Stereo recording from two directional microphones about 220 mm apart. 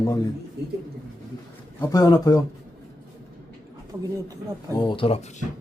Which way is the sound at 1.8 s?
15° left (ahead or behind).